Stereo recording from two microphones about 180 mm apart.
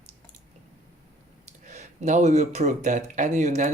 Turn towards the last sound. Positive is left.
turn(degrees=-40)  # may be behind; listen again after turning